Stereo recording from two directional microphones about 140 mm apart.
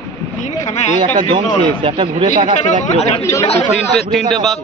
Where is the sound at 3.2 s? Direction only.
20° left (ahead or behind).